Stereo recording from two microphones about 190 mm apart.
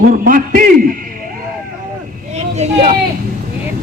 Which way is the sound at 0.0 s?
45° right (ahead or behind).